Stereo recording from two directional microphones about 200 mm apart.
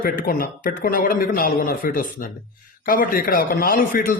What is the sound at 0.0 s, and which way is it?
Speech, 45° left (ahead or behind).